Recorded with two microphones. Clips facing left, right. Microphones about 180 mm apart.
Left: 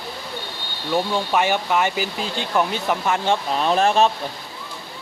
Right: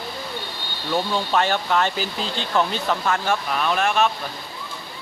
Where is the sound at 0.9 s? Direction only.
10° left (ahead or behind); by 4.1 s 30° left (ahead or behind).